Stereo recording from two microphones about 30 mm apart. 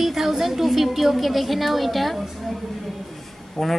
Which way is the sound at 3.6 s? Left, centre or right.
Centre.